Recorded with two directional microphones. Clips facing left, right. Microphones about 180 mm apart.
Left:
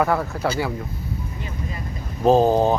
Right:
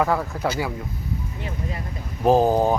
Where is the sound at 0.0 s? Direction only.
15° right (ahead or behind).